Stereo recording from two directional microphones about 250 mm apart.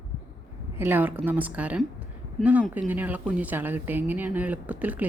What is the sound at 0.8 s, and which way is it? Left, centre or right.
Speech, centre.